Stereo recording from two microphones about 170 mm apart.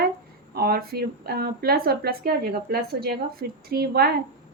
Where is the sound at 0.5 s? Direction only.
65° right (ahead or behind).